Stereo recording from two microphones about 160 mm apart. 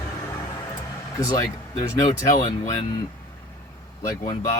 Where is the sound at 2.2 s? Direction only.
50° left (ahead or behind).